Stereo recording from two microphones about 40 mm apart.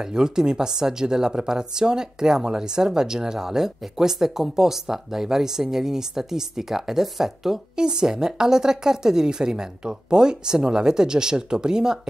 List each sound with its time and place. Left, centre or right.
0.0 s speech: centre